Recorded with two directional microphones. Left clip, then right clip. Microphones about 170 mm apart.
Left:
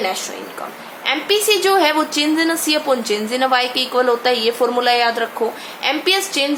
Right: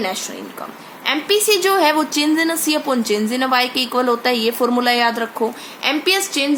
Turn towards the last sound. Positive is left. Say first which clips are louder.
# even
turn(degrees=-35)  # may be behind; listen again after turning